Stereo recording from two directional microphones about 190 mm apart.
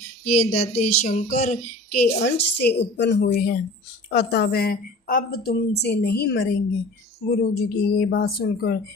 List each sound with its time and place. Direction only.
0.3 s child singing: 35° left (ahead or behind)
2.0 s a woman's voice: 60° left (ahead or behind)